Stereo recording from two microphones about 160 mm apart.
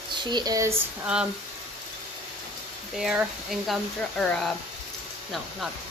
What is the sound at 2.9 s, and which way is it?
Speech, 5° right (ahead or behind).